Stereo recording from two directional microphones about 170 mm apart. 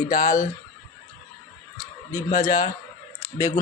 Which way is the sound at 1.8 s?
20° left (ahead or behind).